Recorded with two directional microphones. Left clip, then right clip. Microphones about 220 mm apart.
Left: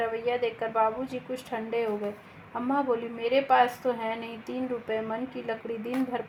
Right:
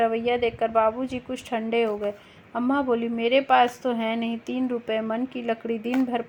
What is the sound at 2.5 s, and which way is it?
A woman's voice, 45° right (ahead or behind).